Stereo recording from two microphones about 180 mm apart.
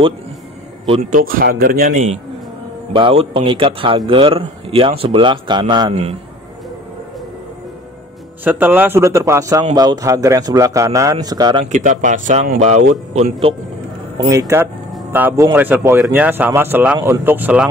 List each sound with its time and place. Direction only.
1.1 s speech: 55° right (ahead or behind)
2.9 s a man's voice: 30° right (ahead or behind)
8.5 s a man's voice: 10° right (ahead or behind)
11.6 s speech: 45° right (ahead or behind)
14.1 s a man's voice: 20° right (ahead or behind)
15.0 s a sound: 10° right (ahead or behind)
15.5 s a man's voice: 10° right (ahead or behind)